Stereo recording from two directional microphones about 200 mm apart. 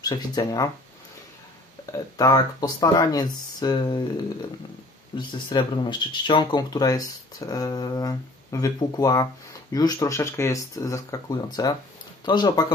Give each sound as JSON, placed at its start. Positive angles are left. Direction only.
{"t": 0.0, "sound": "speech", "side_deg": 20}
{"t": 1.9, "sound": "speech", "side_deg": 20}
{"t": 5.1, "sound": "speech", "side_deg": 25}